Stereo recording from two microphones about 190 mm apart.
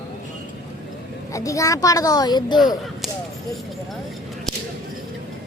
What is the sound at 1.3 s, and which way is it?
A man's voice, 15° left (ahead or behind).